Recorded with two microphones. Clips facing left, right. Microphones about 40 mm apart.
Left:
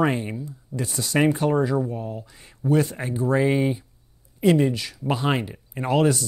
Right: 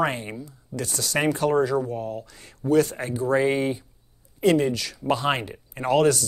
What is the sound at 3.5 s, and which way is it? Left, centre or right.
Speech, centre.